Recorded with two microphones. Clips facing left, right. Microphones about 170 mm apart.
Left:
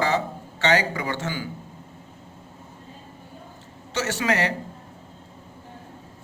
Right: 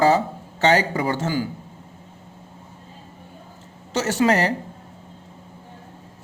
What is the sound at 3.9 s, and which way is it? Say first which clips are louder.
Speech: right 5 dB; 40° right (ahead or behind).